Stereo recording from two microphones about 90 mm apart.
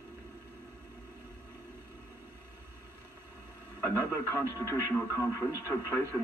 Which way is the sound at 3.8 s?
30° left (ahead or behind).